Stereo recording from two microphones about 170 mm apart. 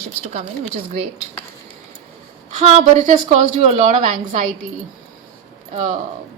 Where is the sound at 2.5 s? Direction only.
40° right (ahead or behind).